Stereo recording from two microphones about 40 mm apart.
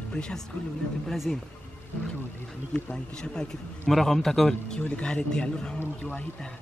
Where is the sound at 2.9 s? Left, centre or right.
Centre.